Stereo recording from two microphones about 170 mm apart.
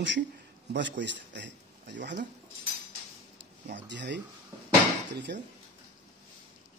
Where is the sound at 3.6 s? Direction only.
90° right.